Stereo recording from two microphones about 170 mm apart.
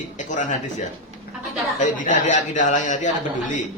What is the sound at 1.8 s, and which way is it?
Speech, 45° left (ahead or behind).